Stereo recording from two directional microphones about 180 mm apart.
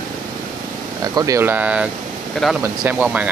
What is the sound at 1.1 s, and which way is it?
Speech, 20° right (ahead or behind).